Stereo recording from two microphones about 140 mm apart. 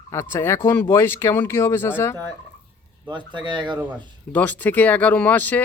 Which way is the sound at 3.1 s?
35° right (ahead or behind).